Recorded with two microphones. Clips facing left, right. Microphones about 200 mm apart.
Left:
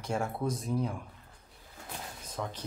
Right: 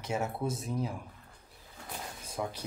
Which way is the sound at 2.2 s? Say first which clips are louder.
Right 2 dB; 10° right (ahead or behind).